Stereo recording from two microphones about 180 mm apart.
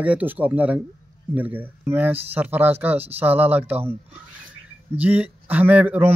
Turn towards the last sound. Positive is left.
turn(degrees=-10)  # may be behind; listen again after turning